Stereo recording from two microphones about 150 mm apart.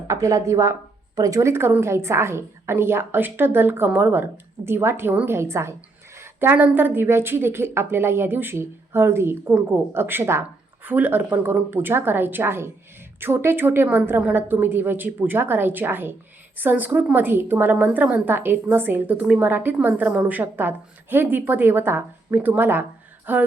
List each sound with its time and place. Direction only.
0.1 s a woman's voice: 20° right (ahead or behind)